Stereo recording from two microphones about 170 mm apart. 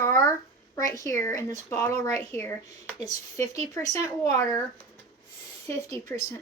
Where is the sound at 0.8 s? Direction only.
20° left (ahead or behind).